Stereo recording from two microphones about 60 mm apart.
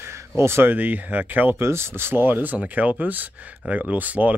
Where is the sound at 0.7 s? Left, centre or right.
Right.